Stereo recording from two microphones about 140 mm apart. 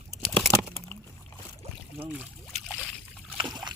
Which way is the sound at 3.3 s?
30° right (ahead or behind).